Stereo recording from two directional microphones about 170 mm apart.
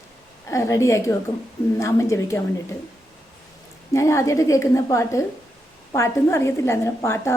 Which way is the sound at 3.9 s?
15° left (ahead or behind).